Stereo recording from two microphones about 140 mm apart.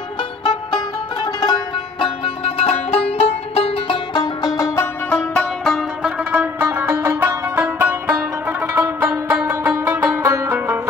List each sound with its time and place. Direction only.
0.7 s music: 30° left (ahead or behind)
2.0 s music: 40° left (ahead or behind)
4.6 s music: 20° left (ahead or behind)
5.3 s music: 5° left (ahead or behind); by 10.8 s 20° right (ahead or behind)